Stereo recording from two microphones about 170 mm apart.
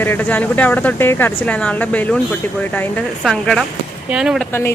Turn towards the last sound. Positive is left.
turn(degrees=-5)  # may be behind; listen again after turning